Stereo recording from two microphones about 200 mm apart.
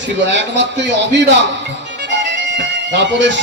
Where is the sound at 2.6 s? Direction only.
60° right (ahead or behind).